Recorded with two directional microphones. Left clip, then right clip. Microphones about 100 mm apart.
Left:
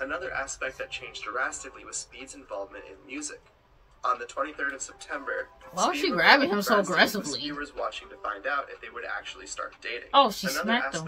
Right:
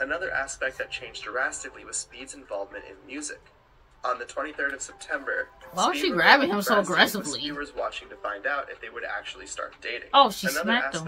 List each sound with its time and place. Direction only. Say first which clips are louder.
0.0 s speech: right 4 dB; 20° right (ahead or behind)
6.0 s speech: right 1 dB; 5° left (ahead or behind)
7.6 s speech: right 2 dB; 15° right (ahead or behind)
10.1 s speech: right 2 dB; 5° left (ahead or behind)